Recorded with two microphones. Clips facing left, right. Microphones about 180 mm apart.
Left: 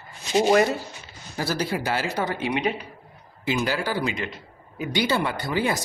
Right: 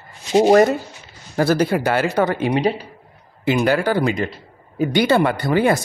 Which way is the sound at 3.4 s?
60° right (ahead or behind).